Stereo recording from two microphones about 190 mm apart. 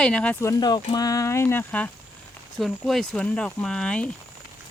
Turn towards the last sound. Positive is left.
turn(degrees=5)  # may be behind; listen again after turning